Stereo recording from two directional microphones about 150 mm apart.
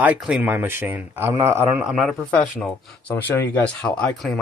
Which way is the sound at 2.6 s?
10° left (ahead or behind).